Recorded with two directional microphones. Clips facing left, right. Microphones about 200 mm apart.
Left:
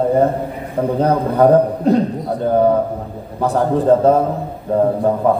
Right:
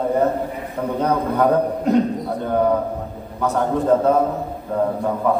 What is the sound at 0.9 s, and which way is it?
A man's voice, 30° left (ahead or behind).